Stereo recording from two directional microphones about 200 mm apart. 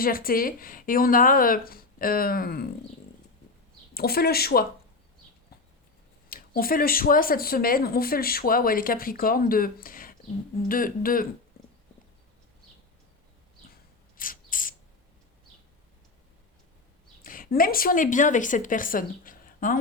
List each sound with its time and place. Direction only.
0.0 s speech: 45° left (ahead or behind)
3.9 s speech: 50° left (ahead or behind)
6.2 s speech: 45° left (ahead or behind)
14.2 s mechanisms: 45° left (ahead or behind)
17.2 s a woman's voice: 45° left (ahead or behind)